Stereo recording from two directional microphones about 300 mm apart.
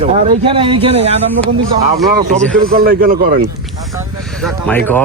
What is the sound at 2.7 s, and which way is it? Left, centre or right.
Speech, right.